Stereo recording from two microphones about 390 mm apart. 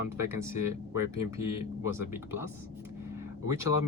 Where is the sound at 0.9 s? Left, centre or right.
Left.